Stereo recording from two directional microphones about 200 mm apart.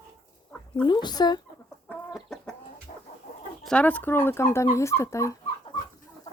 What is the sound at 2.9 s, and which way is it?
Chicken, 35° left (ahead or behind).